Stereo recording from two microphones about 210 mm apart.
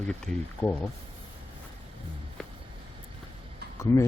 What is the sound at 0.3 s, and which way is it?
Speech, 5° left (ahead or behind).